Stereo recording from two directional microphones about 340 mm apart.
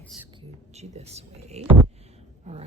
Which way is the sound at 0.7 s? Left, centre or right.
Centre.